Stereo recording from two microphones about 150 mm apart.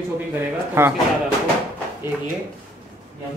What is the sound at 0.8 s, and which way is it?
Speech, 15° right (ahead or behind).